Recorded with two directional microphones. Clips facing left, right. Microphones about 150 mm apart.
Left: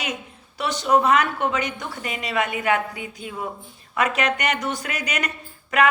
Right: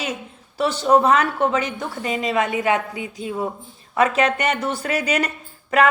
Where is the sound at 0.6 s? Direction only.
30° right (ahead or behind).